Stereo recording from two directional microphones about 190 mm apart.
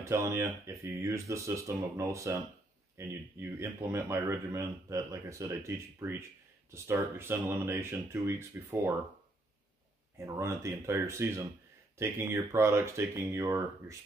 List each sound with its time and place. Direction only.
0.0 s speech: 15° right (ahead or behind)
10.1 s speech: 15° right (ahead or behind)